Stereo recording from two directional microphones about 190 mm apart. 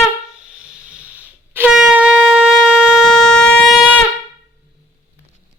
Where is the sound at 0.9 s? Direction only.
5° right (ahead or behind).